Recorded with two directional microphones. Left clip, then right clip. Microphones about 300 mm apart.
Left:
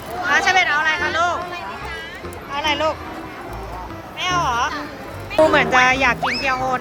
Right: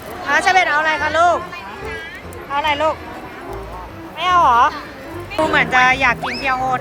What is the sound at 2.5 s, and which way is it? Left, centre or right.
Speech, centre.